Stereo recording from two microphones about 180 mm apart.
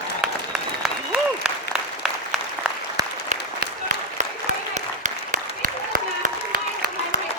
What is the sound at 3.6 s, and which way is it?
Applause, 45° right (ahead or behind).